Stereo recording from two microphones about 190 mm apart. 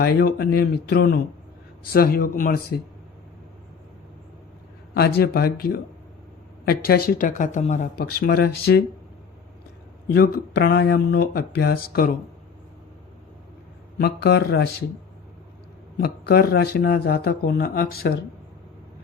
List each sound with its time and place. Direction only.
0.0 s speech: 55° left (ahead or behind)
4.9 s speech: 55° left (ahead or behind)
7.9 s speech: 55° left (ahead or behind)
10.1 s speech: 55° left (ahead or behind)
14.0 s speech: 60° left (ahead or behind)
16.0 s speech: 55° left (ahead or behind)